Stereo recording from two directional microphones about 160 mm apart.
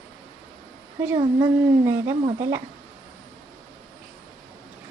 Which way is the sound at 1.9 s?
15° right (ahead or behind).